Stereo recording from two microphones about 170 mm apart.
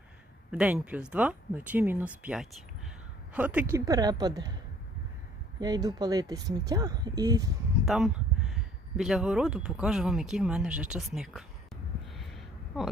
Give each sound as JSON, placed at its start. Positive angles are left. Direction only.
{"t": 0.5, "sound": "a woman's voice", "side_deg": -5}
{"t": 5.5, "sound": "a woman's voice", "side_deg": -25}
{"t": 7.9, "sound": "speech", "side_deg": 0}
{"t": 12.1, "sound": "a sound", "side_deg": 0}